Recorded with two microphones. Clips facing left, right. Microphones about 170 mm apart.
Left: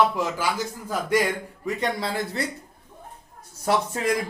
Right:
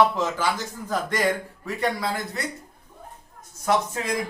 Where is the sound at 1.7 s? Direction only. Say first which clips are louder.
Right 2 dB; 25° left (ahead or behind).